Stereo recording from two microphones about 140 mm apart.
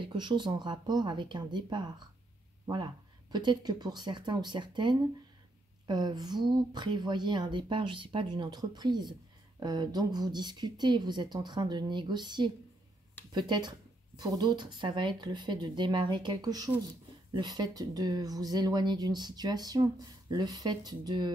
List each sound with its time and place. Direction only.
0.0 s speech: 35° right (ahead or behind)